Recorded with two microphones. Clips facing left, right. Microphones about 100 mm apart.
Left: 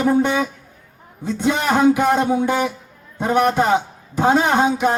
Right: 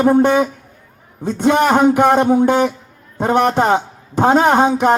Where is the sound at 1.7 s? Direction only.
20° right (ahead or behind).